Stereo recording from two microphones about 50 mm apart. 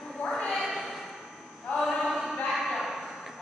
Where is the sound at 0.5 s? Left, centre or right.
Centre.